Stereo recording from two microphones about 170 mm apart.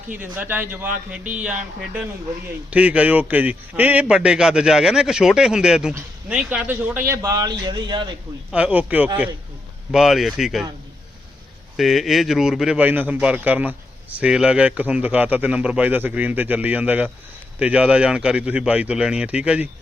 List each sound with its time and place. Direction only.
0.1 s a man's voice: 10° right (ahead or behind); by 8.1 s 25° right (ahead or behind)
8.5 s a man's voice: 10° right (ahead or behind)
11.8 s speech: centre (ahead or behind)